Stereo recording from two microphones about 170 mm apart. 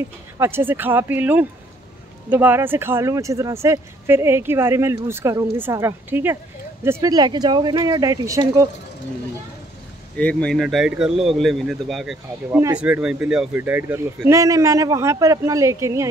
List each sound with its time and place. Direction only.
0.4 s speech: 15° right (ahead or behind)
10.1 s a man's voice: 5° left (ahead or behind); by 16.1 s 15° right (ahead or behind)